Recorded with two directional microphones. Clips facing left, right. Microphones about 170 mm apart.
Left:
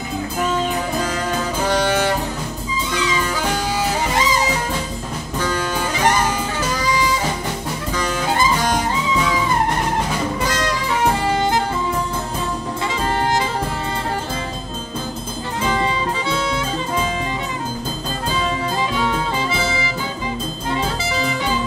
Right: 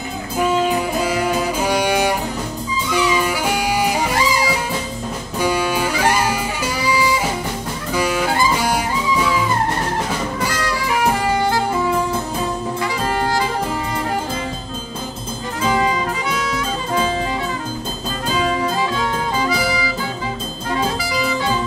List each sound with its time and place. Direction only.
0.4 s music: 10° right (ahead or behind)
4.1 s music: 20° left (ahead or behind)
5.4 s music: 10° right (ahead or behind)
7.9 s jazz: 10° right (ahead or behind)
8.5 s music: 10° right (ahead or behind)
19.5 s music: 25° left (ahead or behind)